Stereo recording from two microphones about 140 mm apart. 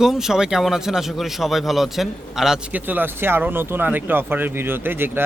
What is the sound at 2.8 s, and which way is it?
Speech, 15° right (ahead or behind).